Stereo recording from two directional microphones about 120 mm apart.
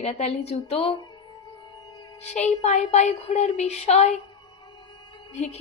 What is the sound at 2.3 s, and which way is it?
Speech, 80° left.